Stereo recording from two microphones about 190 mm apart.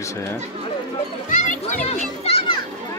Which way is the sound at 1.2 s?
45° left (ahead or behind).